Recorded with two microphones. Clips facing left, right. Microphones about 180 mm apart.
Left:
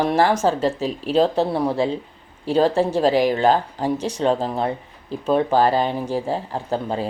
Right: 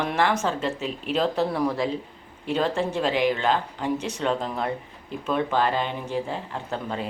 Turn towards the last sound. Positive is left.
turn(degrees=35)  # may be behind; listen again after turning